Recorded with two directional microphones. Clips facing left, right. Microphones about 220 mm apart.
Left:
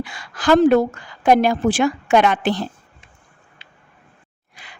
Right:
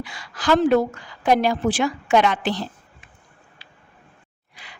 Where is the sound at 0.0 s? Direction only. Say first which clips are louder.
Left 4 dB; 55° left (ahead or behind).